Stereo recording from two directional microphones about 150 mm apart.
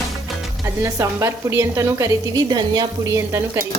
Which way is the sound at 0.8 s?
20° right (ahead or behind).